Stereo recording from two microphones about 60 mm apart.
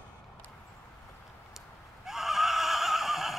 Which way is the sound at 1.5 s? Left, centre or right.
Centre.